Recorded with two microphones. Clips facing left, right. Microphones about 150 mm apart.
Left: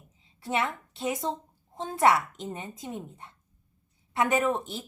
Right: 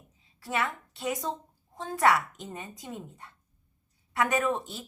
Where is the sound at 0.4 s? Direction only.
20° left (ahead or behind).